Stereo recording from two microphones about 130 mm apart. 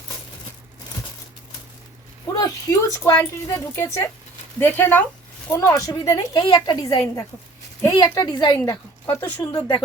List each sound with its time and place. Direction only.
2.2 s a woman's voice: 25° left (ahead or behind)